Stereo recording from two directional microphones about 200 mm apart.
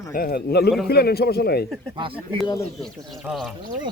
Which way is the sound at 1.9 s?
25° right (ahead or behind).